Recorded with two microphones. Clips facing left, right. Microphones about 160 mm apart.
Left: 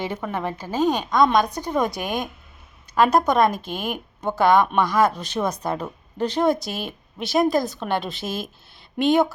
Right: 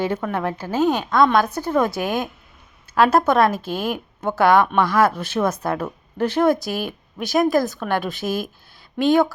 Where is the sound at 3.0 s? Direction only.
15° left (ahead or behind).